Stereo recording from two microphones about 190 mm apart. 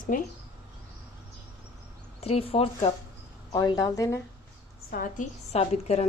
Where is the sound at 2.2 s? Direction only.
30° left (ahead or behind).